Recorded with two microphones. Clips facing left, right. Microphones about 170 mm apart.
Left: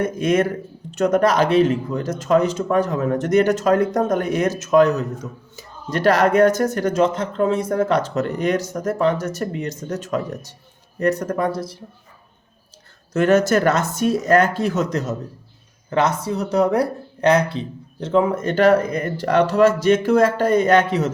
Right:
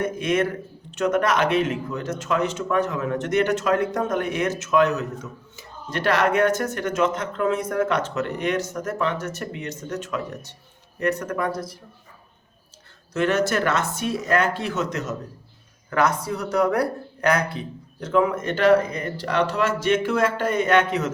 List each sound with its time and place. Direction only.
0.0 s speech: 40° left (ahead or behind)
13.1 s speech: 45° left (ahead or behind)
15.9 s speech: 25° left (ahead or behind)